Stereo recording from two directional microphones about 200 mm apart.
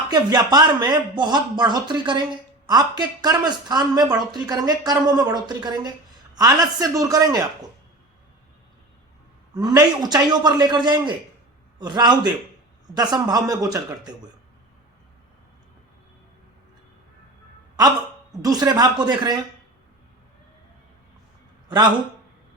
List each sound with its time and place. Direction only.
0.1 s a man's voice: 20° right (ahead or behind)
9.6 s speech: 20° right (ahead or behind)
17.7 s a woman's voice: 20° right (ahead or behind)